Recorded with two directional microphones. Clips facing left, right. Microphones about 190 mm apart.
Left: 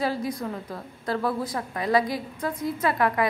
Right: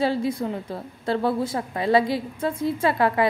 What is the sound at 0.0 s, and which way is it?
A woman's voice, 25° right (ahead or behind).